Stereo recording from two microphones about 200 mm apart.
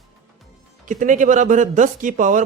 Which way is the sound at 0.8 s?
40° right (ahead or behind).